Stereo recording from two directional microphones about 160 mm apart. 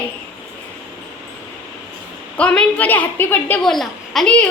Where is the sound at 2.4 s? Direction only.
5° left (ahead or behind).